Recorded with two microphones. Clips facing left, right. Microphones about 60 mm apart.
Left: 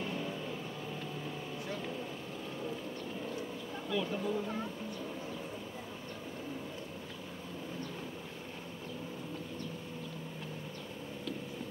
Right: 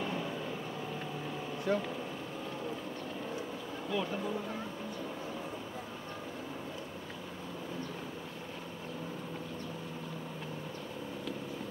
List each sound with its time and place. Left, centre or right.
0.0 s vehicle: right
1.7 s speech: right
3.9 s speech: centre